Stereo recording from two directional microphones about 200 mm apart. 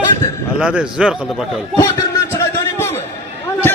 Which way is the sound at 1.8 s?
15° left (ahead or behind).